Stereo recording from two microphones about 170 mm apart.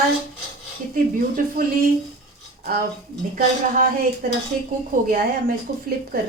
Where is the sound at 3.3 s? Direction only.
55° right (ahead or behind).